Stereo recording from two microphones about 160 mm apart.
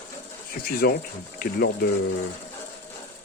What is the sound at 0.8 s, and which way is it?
Speech, 70° left (ahead or behind).